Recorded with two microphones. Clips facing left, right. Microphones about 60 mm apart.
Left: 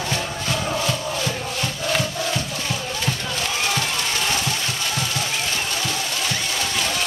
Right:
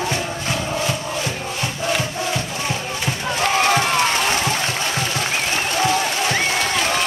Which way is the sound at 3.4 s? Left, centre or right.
Right.